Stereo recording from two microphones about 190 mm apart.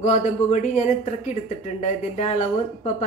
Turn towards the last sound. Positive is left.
turn(degrees=40)  # may be behind; listen again after turning